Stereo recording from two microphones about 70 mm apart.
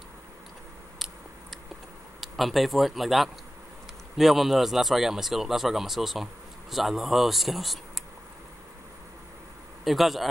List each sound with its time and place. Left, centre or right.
0.9 s a sound: centre
2.1 s speech: centre
9.8 s speech: centre